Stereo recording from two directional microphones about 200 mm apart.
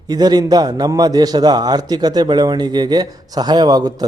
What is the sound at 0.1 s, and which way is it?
A man's voice, 20° right (ahead or behind).